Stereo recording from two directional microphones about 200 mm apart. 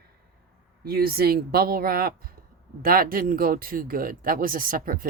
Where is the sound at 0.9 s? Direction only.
50° right (ahead or behind).